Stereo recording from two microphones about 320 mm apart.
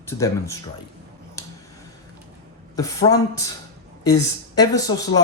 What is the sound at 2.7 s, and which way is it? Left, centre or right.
Speech, centre.